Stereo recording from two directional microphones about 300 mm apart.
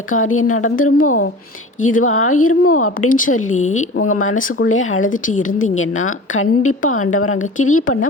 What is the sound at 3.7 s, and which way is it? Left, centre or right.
Speech, left.